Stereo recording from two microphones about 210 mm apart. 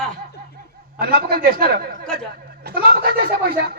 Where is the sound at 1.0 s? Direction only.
45° right (ahead or behind).